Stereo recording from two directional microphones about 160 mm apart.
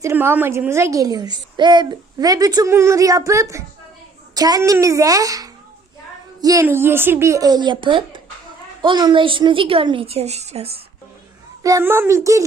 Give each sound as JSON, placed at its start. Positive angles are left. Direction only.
{"t": 0.0, "sound": "a woman's voice", "side_deg": -15}
{"t": 11.6, "sound": "a woman's voice", "side_deg": -15}